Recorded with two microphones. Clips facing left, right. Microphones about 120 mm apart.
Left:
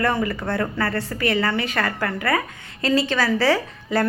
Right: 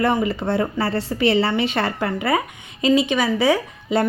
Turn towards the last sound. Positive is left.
turn(degrees=-15)  # may be behind; listen again after turning